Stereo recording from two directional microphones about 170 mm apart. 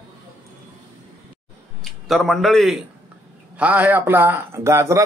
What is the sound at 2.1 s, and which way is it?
A man's voice, centre (ahead or behind).